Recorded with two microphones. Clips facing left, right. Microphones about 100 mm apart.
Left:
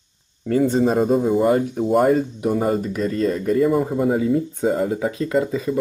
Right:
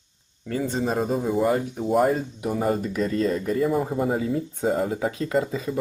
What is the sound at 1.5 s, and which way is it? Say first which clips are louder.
Speech: left 5 dB; 50° left (ahead or behind).